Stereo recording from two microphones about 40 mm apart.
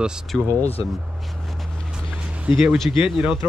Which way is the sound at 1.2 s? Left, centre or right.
Centre.